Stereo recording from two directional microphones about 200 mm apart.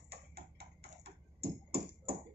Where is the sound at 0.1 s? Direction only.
55° right (ahead or behind).